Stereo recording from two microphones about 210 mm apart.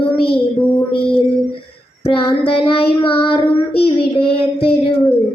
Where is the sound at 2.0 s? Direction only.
25° left (ahead or behind).